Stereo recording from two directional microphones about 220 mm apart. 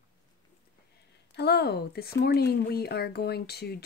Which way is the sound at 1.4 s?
50° left (ahead or behind).